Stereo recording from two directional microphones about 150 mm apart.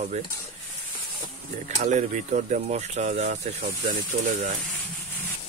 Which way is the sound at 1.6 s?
55° right (ahead or behind).